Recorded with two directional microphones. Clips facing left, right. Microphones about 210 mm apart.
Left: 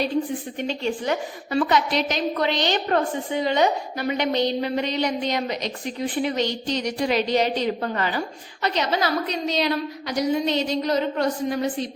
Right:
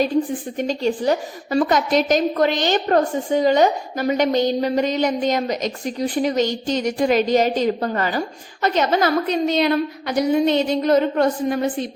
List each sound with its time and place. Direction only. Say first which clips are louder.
0.5 s a woman's voice: right 6 dB; 40° right (ahead or behind)